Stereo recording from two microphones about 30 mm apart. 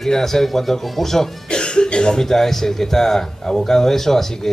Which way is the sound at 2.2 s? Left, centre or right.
Centre.